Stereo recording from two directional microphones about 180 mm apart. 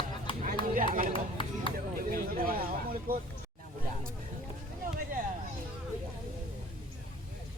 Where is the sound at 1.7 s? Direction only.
50° right (ahead or behind).